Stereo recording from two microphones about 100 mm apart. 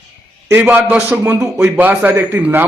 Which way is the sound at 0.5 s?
20° right (ahead or behind).